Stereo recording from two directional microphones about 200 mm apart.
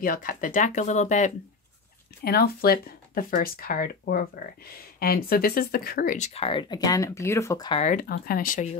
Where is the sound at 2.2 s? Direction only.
50° left (ahead or behind); by 7.8 s 20° left (ahead or behind).